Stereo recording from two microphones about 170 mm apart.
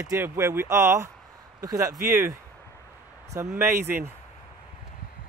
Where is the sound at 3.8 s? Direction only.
10° right (ahead or behind).